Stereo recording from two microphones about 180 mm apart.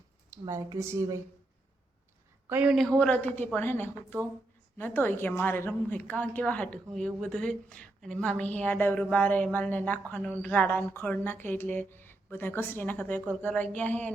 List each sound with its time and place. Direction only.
0.3 s speech: 20° right (ahead or behind)
2.5 s a man's voice: 5° right (ahead or behind)
3.0 s speech: 10° left (ahead or behind)